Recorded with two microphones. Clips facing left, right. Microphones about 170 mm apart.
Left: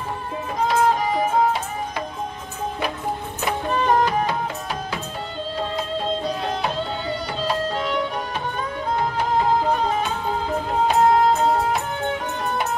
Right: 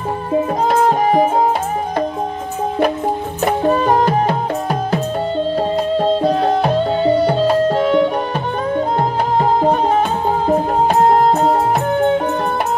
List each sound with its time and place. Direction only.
0.7 s music: 50° right (ahead or behind)
3.4 s music: 40° right (ahead or behind)
4.0 s music: 50° right (ahead or behind)
5.9 s music: 50° right (ahead or behind)
9.4 s music: 50° right (ahead or behind)